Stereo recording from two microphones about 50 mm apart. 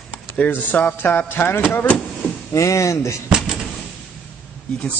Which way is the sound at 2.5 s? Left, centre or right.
Left.